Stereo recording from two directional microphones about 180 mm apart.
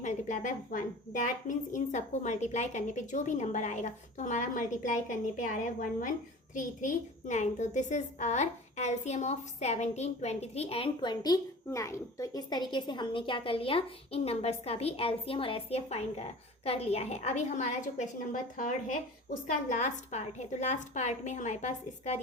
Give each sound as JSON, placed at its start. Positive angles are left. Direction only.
{"t": 0.0, "sound": "a woman's voice", "side_deg": 45}